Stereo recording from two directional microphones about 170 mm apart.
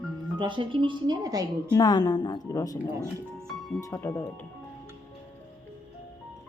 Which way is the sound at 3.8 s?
20° left (ahead or behind).